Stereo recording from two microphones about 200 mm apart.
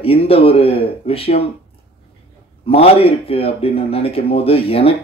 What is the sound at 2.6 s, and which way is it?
Speech, 30° left (ahead or behind).